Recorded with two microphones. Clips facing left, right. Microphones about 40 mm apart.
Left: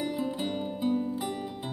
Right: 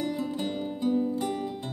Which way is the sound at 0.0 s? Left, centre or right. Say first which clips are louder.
Right 1 dB; centre.